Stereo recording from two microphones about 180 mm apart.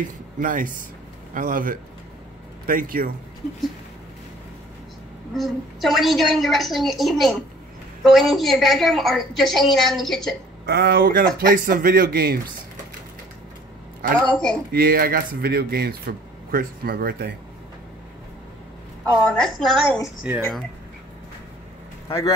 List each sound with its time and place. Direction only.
0.0 s speech: 45° right (ahead or behind)
5.3 s a woman's voice: centre (ahead or behind)
10.6 s speech: 60° right (ahead or behind)
14.1 s a woman's voice: 5° left (ahead or behind)
14.7 s speech: 55° right (ahead or behind)
19.3 s a woman's voice: centre (ahead or behind)